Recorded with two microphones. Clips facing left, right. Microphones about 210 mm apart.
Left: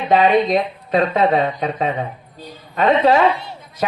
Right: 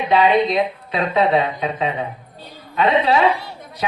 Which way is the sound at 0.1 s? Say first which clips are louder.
Left 2 dB; 45° left (ahead or behind).